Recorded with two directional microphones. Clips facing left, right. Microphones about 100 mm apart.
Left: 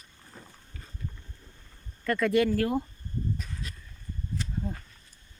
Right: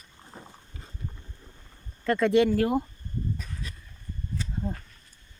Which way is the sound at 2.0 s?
25° right (ahead or behind).